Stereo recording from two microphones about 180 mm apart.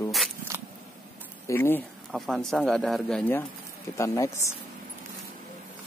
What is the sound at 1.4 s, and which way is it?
Speech, 15° left (ahead or behind).